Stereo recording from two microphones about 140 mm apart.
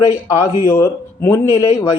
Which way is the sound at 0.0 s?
25° left (ahead or behind).